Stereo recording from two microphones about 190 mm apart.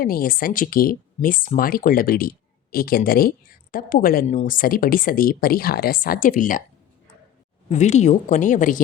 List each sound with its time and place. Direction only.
0.0 s speech: 50° left (ahead or behind)
7.7 s speech: 40° left (ahead or behind)